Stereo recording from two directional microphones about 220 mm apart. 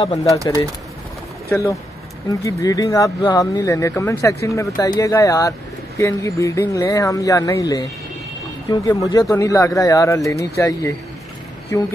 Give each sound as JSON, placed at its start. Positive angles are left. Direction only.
{"t": 0.1, "sound": "speech", "side_deg": 15}
{"t": 1.5, "sound": "speech", "side_deg": 15}